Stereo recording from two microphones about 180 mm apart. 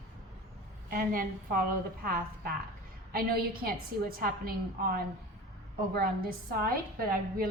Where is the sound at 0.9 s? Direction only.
55° right (ahead or behind).